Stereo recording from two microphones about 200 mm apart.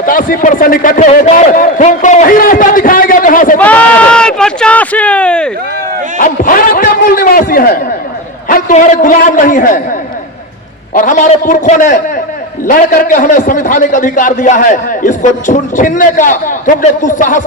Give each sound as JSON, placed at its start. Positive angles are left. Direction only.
{"t": 0.0, "sound": "a man's voice", "side_deg": 45}
{"t": 3.6, "sound": "speech", "side_deg": 5}
{"t": 6.1, "sound": "a man's voice", "side_deg": 40}
{"t": 10.9, "sound": "a man's voice", "side_deg": 40}